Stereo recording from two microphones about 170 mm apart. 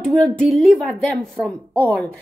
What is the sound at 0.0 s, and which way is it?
Speech, 5° left (ahead or behind).